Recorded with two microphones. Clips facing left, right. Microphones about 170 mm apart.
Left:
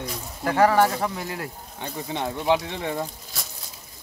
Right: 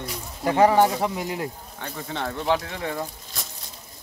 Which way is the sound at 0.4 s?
20° right (ahead or behind).